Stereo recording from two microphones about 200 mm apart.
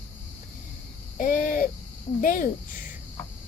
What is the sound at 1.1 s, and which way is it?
Owl, 45° left (ahead or behind).